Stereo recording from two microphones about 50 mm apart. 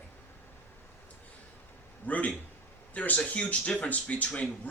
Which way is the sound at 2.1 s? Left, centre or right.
Left.